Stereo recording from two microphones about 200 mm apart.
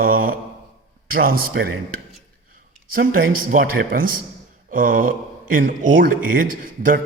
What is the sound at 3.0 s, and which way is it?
Speech, 45° right (ahead or behind).